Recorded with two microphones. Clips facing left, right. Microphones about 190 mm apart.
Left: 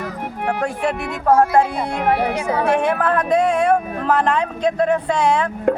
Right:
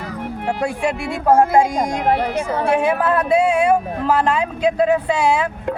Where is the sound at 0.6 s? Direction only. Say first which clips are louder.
Right 2 dB; 10° right (ahead or behind).